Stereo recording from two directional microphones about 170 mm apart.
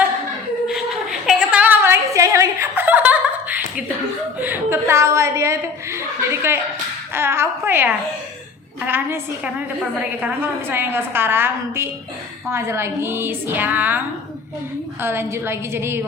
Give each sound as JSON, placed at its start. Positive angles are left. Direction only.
{"t": 1.3, "sound": "a sound", "side_deg": -5}
{"t": 4.4, "sound": "a woman's voice", "side_deg": -10}
{"t": 15.0, "sound": "a woman's voice", "side_deg": -15}